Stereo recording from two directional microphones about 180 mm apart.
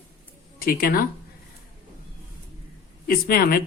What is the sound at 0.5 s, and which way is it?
Speech, 55° left (ahead or behind).